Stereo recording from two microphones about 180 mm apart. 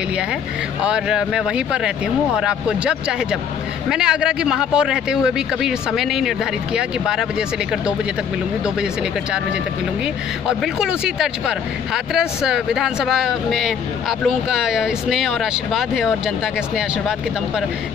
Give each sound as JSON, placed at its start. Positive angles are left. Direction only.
{"t": 0.8, "sound": "speech", "side_deg": -5}
{"t": 10.4, "sound": "speech", "side_deg": -5}